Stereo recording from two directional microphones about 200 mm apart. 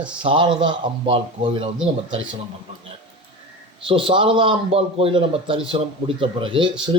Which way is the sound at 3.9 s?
25° right (ahead or behind).